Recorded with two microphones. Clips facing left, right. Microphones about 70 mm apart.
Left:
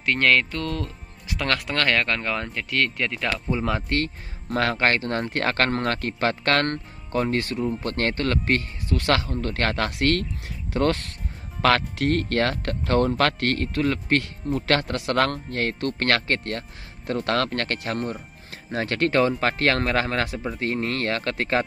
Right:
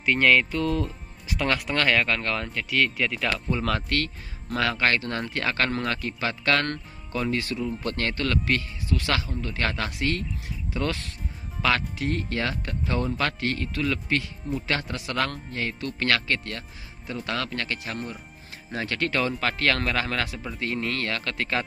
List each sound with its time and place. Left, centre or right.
0.0 s speech: centre
3.3 s speech: centre
4.0 s speech: left
10.7 s speech: left
17.0 s speech: left